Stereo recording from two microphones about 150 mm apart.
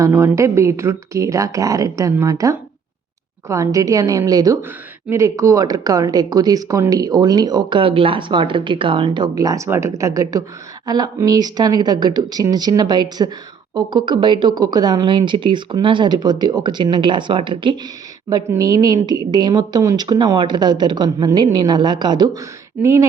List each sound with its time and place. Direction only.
0.0 s speech: 15° right (ahead or behind)